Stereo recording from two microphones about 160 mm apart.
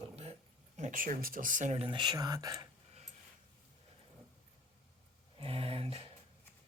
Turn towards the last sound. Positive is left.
turn(degrees=-35)  # may be behind; listen again after turning